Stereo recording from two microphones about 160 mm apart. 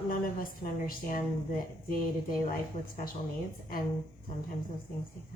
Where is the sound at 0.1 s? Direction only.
60° left (ahead or behind).